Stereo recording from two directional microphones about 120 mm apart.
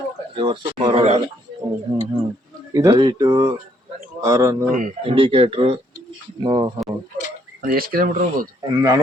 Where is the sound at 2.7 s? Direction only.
30° right (ahead or behind).